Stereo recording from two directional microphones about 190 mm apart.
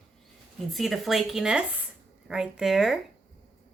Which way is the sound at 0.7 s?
Centre (ahead or behind).